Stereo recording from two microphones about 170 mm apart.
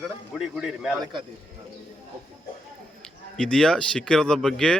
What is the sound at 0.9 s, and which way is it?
Speech, 20° right (ahead or behind).